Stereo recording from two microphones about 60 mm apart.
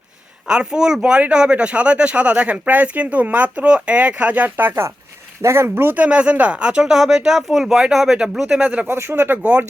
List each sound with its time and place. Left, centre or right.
0.4 s speech: centre; by 6.1 s right
6.1 s speech: right
8.9 s speech: right
9.4 s speech: right